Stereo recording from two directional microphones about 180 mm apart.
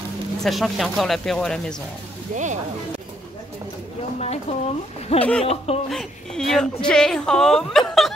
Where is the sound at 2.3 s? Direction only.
45° right (ahead or behind).